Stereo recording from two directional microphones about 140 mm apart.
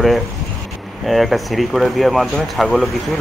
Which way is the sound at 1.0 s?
Centre (ahead or behind).